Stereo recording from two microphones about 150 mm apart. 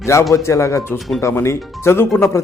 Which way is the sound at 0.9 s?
Centre (ahead or behind).